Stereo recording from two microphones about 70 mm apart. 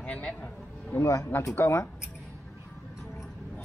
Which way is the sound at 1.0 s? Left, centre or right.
Left.